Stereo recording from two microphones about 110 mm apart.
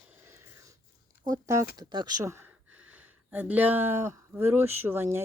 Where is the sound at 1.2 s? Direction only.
30° right (ahead or behind).